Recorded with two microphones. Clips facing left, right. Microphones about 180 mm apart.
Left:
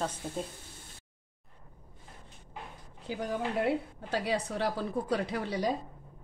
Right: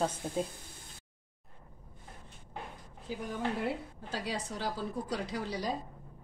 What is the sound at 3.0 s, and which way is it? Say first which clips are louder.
A woman's voice: left 2 dB; 70° left (ahead or behind).